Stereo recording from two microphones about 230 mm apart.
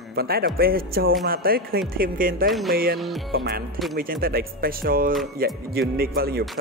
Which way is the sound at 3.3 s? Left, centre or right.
Right.